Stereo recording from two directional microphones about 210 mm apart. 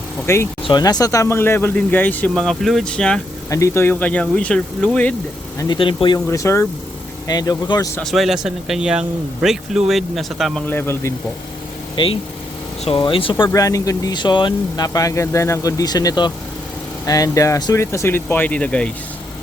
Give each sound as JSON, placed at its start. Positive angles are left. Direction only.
{"t": 0.3, "sound": "speech", "side_deg": 10}
{"t": 5.5, "sound": "speech", "side_deg": 20}
{"t": 6.1, "sound": "speech", "side_deg": 15}
{"t": 8.0, "sound": "speech", "side_deg": 0}
{"t": 10.7, "sound": "speech", "side_deg": 10}
{"t": 12.0, "sound": "speech", "side_deg": 25}